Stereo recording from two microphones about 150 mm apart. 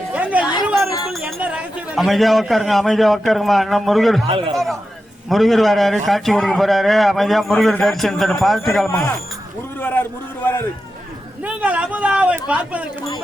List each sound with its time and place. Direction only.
0.1 s chatter: 10° right (ahead or behind)
1.0 s a sound: 5° right (ahead or behind)
1.4 s a man's voice: 10° right (ahead or behind)
4.3 s a man's voice: 40° right (ahead or behind)
4.5 s a man's voice: centre (ahead or behind)
8.9 s speech: 15° left (ahead or behind)
9.7 s a sound: 15° left (ahead or behind)
10.4 s speech: 15° left (ahead or behind)
11.4 s speech: 10° right (ahead or behind)